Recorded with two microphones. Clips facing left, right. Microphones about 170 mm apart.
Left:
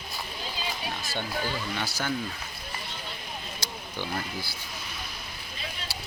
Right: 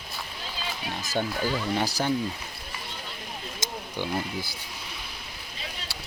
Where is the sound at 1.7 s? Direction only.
35° right (ahead or behind).